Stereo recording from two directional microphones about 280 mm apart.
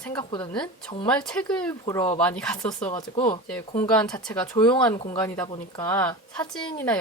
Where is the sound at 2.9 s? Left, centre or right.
Centre.